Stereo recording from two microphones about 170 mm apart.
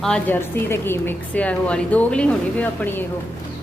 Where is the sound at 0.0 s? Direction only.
5° left (ahead or behind).